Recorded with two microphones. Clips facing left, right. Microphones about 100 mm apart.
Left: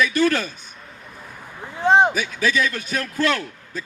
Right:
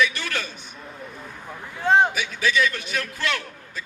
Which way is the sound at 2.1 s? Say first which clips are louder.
Left 1 dB; 40° left (ahead or behind).